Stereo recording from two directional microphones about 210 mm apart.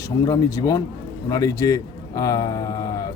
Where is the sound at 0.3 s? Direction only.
15° left (ahead or behind).